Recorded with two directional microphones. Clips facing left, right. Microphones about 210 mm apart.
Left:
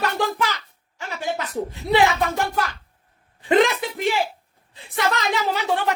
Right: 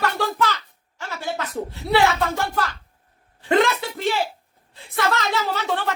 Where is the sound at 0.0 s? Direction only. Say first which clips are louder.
Even; 15° left (ahead or behind).